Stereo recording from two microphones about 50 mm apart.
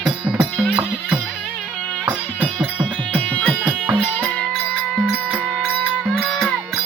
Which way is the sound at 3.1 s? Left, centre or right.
Left.